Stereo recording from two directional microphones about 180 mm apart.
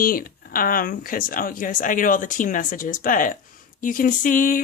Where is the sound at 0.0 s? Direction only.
55° left (ahead or behind).